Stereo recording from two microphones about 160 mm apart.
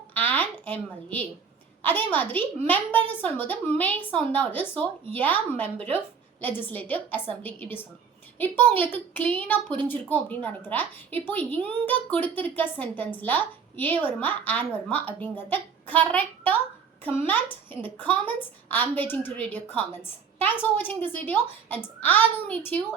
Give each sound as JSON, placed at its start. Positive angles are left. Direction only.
{"t": 0.1, "sound": "a woman's voice", "side_deg": 10}